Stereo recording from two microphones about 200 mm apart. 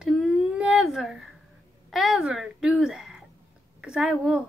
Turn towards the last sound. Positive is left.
turn(degrees=0)  # may be behind; listen again after turning